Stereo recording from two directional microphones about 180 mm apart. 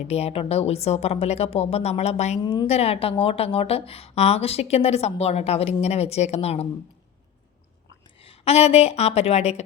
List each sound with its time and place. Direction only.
0.1 s a woman's voice: 35° left (ahead or behind)
2.4 s a woman's voice: 25° left (ahead or behind)
2.6 s a woman's voice: 35° left (ahead or behind)
8.2 s a woman's voice: 35° left (ahead or behind)